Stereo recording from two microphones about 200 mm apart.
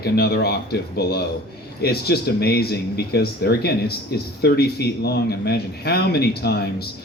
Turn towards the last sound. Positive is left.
turn(degrees=55)  # may be behind; listen again after turning